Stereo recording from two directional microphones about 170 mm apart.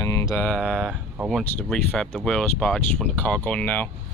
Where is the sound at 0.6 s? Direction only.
Centre (ahead or behind).